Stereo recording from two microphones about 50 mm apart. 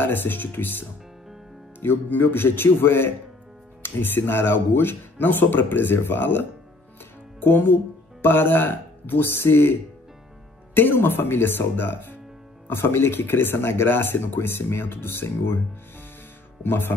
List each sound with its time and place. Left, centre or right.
0.0 s speech: left